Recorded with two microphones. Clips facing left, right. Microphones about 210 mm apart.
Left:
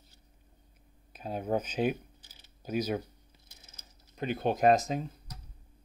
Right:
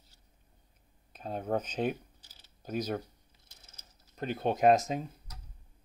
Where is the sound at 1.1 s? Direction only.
5° left (ahead or behind).